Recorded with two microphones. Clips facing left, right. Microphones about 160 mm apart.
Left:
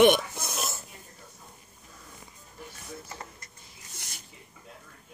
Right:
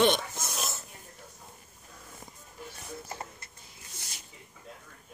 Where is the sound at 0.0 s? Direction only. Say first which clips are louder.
Left 5 dB; 15° left (ahead or behind).